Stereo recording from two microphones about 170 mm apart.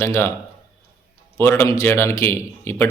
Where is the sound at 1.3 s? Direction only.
15° left (ahead or behind).